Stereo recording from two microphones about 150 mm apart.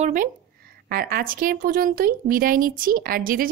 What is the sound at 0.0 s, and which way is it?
Speech, 60° right (ahead or behind).